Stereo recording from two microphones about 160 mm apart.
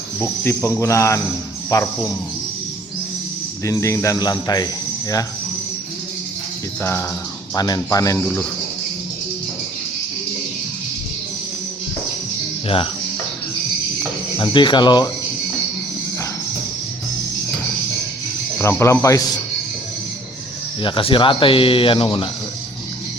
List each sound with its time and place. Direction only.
0.2 s speech: 15° left (ahead or behind)
3.7 s speech: 20° left (ahead or behind)
7.5 s speech: 25° left (ahead or behind)
12.6 s speech: 35° left (ahead or behind)
14.3 s speech: 30° left (ahead or behind)
18.6 s speech: 15° left (ahead or behind)
20.8 s speech: 35° left (ahead or behind)